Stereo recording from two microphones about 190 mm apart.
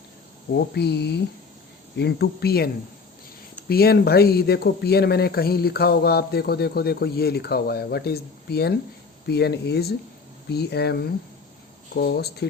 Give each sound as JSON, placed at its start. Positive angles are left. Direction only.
{"t": 0.5, "sound": "speech", "side_deg": 60}
{"t": 3.7, "sound": "speech", "side_deg": 55}